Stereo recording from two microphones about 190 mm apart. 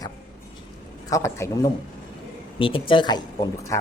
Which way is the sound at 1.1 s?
15° left (ahead or behind).